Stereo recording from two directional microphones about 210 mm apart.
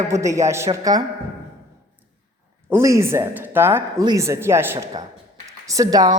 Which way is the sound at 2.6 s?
15° right (ahead or behind).